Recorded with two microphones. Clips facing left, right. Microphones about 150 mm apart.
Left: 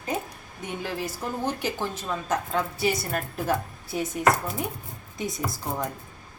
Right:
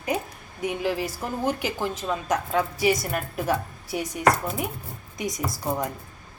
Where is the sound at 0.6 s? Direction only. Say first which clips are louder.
Right 5 dB; 15° right (ahead or behind).